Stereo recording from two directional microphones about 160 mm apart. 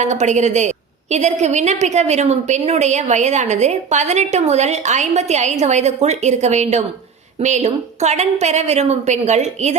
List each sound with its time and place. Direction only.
0.0 s a woman's voice: 50° right (ahead or behind)